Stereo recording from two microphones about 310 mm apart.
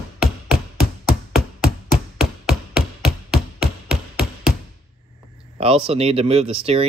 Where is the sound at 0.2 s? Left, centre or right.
Centre.